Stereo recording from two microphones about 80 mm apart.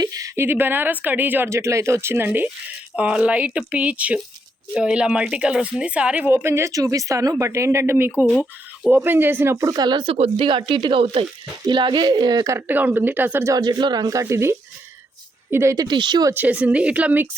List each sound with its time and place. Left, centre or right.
0.0 s speech: right
0.3 s speech: right
1.5 s a woman's voice: right
9.7 s speech: right
11.7 s speech: right
12.6 s speech: right
13.5 s speech: right
15.9 s speech: right
16.3 s speech: centre